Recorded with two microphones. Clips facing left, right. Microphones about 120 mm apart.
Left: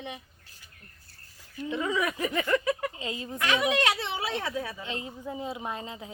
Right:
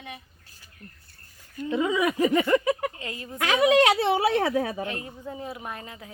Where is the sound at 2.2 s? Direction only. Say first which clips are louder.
Right 6 dB; 35° right (ahead or behind).